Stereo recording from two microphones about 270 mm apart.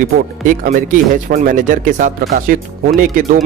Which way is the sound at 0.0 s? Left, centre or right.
Right.